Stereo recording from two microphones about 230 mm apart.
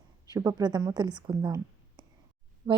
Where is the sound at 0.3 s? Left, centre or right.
Centre.